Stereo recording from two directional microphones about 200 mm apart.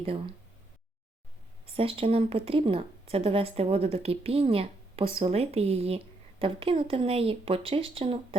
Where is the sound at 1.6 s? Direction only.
25° right (ahead or behind).